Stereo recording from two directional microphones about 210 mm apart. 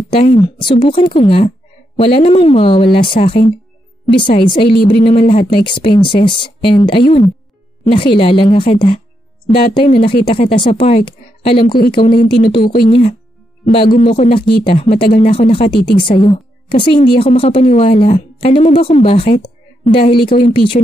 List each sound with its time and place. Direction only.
0.1 s speech: 30° left (ahead or behind)
5.6 s speech: 25° left (ahead or behind)
13.8 s a woman's voice: 35° left (ahead or behind)